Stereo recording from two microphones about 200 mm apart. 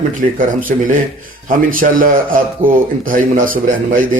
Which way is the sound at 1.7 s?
45° right (ahead or behind).